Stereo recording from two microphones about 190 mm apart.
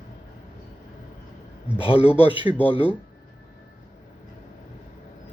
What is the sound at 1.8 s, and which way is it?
Speech, 30° left (ahead or behind).